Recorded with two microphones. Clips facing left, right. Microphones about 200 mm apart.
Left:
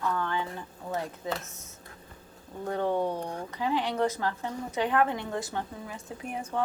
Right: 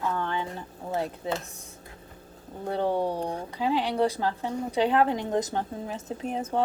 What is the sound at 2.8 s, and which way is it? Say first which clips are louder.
Speech: right 2 dB; 10° right (ahead or behind).